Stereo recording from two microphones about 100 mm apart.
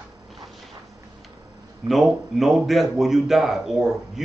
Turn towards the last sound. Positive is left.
turn(degrees=-5)  # may be behind; listen again after turning